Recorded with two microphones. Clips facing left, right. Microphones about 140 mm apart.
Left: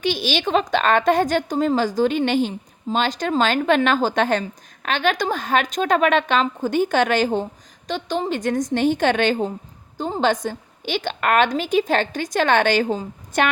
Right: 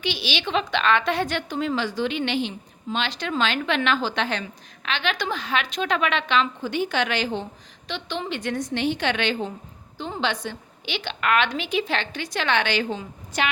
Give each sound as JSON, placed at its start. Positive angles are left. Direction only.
{"t": 0.0, "sound": "a woman's voice", "side_deg": 45}